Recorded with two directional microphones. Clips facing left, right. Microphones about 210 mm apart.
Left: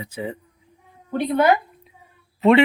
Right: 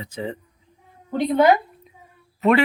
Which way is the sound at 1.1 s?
15° right (ahead or behind).